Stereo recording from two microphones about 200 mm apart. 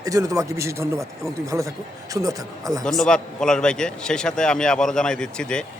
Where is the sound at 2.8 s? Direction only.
5° left (ahead or behind).